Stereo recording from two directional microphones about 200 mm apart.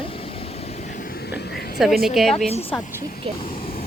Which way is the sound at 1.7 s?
Centre (ahead or behind).